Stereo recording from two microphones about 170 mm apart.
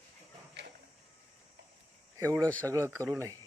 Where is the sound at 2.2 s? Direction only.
15° right (ahead or behind).